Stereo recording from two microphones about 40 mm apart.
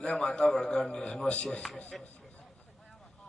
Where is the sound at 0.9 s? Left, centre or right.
Left.